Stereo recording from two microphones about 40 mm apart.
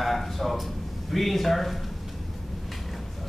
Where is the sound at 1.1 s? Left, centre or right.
Centre.